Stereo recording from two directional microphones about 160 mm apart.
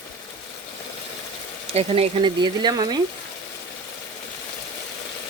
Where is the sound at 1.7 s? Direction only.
35° right (ahead or behind).